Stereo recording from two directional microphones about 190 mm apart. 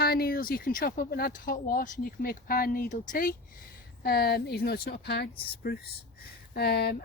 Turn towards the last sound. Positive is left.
turn(degrees=55)  # may be behind; listen again after turning